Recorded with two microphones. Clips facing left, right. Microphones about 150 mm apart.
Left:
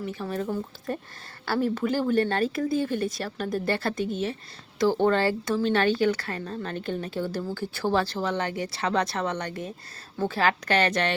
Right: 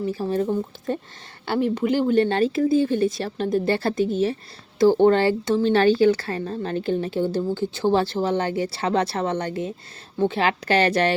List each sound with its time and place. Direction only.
0.0 s speech: 30° right (ahead or behind)
1.7 s speech: 20° right (ahead or behind)